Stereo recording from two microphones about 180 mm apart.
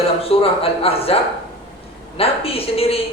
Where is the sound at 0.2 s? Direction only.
30° left (ahead or behind).